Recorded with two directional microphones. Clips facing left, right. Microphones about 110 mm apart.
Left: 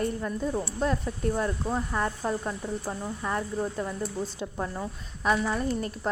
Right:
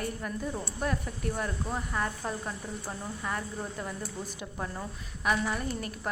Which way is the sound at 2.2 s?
10° left (ahead or behind).